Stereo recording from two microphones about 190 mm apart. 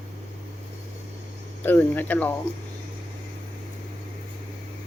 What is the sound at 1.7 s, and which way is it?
Speech, 10° left (ahead or behind).